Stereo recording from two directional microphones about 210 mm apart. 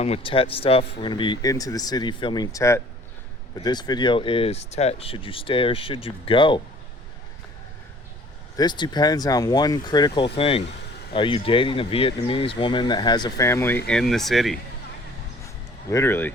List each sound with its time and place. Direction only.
0.0 s speech: 30° left (ahead or behind)
8.5 s speech: 20° left (ahead or behind); by 14.6 s centre (ahead or behind)
15.9 s speech: 10° left (ahead or behind)